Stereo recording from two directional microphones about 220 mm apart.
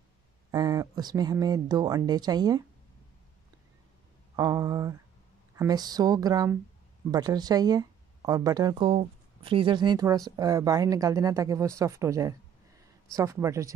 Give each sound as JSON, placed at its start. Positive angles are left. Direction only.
{"t": 0.5, "sound": "speech", "side_deg": -15}
{"t": 4.4, "sound": "speech", "side_deg": -15}